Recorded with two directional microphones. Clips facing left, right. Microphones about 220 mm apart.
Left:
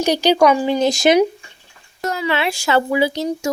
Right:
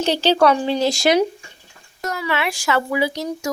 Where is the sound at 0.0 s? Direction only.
15° left (ahead or behind).